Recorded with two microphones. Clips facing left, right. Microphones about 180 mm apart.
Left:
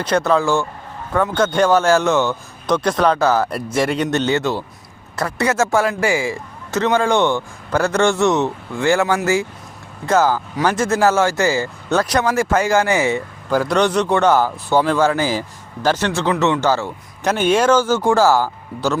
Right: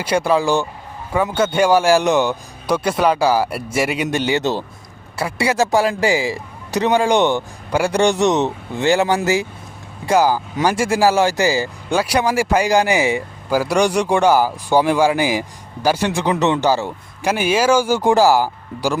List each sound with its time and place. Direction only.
0.0 s speech: 10° right (ahead or behind)